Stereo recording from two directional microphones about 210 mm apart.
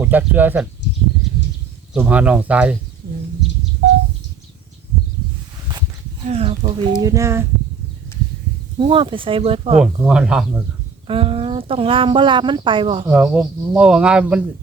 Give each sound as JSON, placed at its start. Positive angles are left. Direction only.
{"t": 0.0, "sound": "speech", "side_deg": -10}
{"t": 1.9, "sound": "speech", "side_deg": -5}
{"t": 6.2, "sound": "speech", "side_deg": -30}
{"t": 7.0, "sound": "speech", "side_deg": -15}
{"t": 8.8, "sound": "speech", "side_deg": -25}
{"t": 9.8, "sound": "speech", "side_deg": -5}
{"t": 11.0, "sound": "speech", "side_deg": -25}
{"t": 13.1, "sound": "speech", "side_deg": -5}